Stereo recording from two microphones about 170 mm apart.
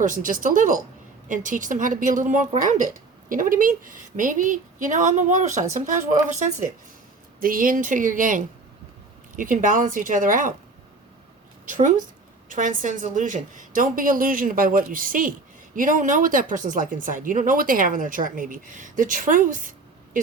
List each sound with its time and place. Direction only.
0.0 s a woman's voice: 50° right (ahead or behind)
11.7 s a woman's voice: 50° right (ahead or behind)